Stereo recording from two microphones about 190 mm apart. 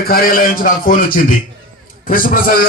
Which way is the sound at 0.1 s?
50° left (ahead or behind).